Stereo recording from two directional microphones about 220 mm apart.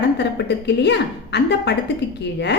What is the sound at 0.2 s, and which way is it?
A woman's voice, 50° left (ahead or behind).